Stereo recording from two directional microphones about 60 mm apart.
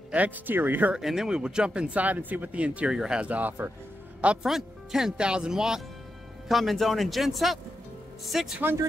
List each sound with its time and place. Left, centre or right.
0.1 s speech: right
0.9 s speech: centre
2.9 s speech: centre
3.3 s speech: right
4.4 s speech: centre